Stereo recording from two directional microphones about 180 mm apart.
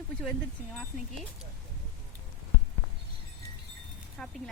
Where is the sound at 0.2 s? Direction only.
5° left (ahead or behind).